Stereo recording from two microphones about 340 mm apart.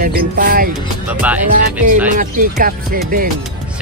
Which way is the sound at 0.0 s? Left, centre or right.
Right.